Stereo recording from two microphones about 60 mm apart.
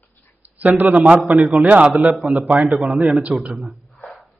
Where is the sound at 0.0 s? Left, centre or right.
Left.